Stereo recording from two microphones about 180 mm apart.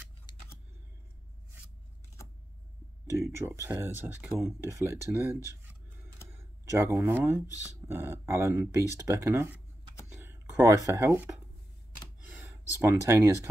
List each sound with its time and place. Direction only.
0.3 s vehicle: 25° left (ahead or behind)
3.1 s speech: 15° right (ahead or behind)
12.4 s speech: 15° right (ahead or behind)